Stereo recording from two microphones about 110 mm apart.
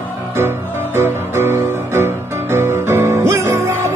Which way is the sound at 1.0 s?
25° right (ahead or behind).